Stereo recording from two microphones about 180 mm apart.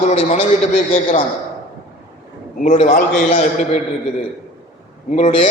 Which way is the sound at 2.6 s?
40° left (ahead or behind).